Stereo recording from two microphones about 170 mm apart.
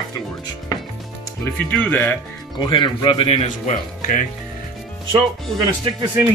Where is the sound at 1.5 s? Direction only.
10° left (ahead or behind).